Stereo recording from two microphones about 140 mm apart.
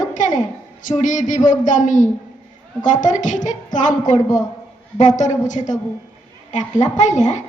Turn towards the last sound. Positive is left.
turn(degrees=60)  # may be behind; listen again after turning